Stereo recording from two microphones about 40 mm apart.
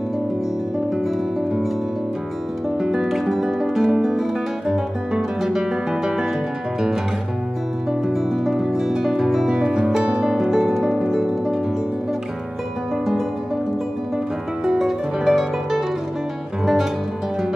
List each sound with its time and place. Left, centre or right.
2.8 s music: centre
3.1 s music: centre
4.6 s guitar: centre
8.1 s music: centre
9.5 s music: right
10.2 s harp: centre
14.6 s music: centre